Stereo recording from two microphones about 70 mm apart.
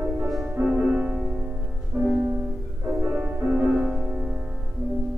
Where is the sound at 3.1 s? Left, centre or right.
Centre.